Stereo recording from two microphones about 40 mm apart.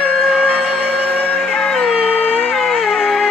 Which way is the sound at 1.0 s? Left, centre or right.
Left.